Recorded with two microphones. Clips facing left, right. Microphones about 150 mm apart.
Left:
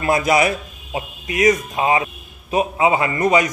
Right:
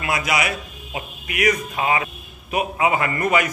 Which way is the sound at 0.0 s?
40° left (ahead or behind).